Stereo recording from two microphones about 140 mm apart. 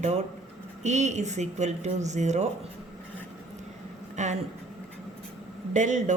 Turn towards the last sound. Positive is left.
turn(degrees=-60)  # may be behind; listen again after turning